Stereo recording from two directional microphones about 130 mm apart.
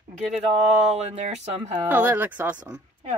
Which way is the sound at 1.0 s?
60° right (ahead or behind).